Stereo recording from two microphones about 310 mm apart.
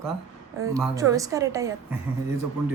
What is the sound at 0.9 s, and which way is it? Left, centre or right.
Speech, centre.